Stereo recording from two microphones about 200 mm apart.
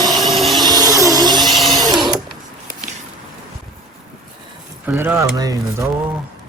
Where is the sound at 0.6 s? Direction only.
20° right (ahead or behind).